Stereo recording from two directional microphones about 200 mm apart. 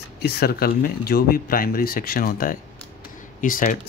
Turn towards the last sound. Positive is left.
turn(degrees=45)  # may be behind; listen again after turning